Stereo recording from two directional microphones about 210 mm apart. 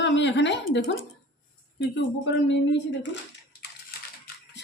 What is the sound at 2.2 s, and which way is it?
Speech, 60° left (ahead or behind).